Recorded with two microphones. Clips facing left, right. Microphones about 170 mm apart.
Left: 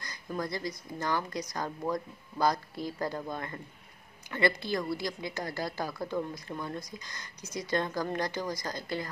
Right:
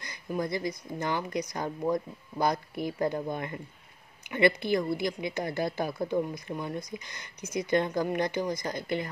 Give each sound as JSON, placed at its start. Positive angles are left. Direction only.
{"t": 0.0, "sound": "a woman's voice", "side_deg": -20}